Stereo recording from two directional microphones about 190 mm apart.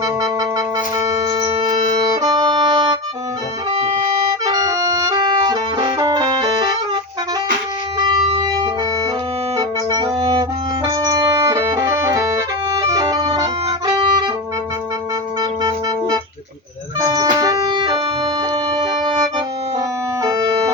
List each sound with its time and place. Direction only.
0.0 s music: 20° right (ahead or behind)
4.3 s brass instrument: 20° right (ahead or behind)
8.0 s wind instrument: 25° right (ahead or behind)
9.6 s music: 20° right (ahead or behind)
15.4 s music: 20° right (ahead or behind)
20.2 s organ: 20° right (ahead or behind)